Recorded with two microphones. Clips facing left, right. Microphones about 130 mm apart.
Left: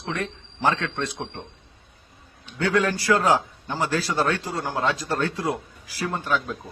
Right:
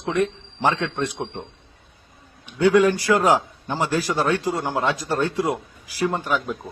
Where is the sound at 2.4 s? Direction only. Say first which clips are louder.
Right 6 dB; 15° right (ahead or behind).